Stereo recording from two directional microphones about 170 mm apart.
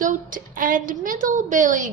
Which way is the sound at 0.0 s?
50° right (ahead or behind).